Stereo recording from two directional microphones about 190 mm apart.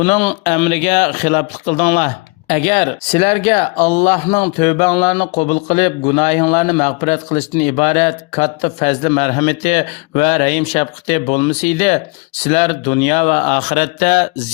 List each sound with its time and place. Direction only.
0.0 s a man's voice: 35° left (ahead or behind)